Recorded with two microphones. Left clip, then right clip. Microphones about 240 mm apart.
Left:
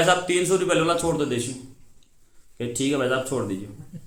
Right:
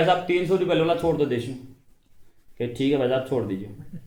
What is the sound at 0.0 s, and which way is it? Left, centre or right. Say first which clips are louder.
A man's voice: left 1 dB; left.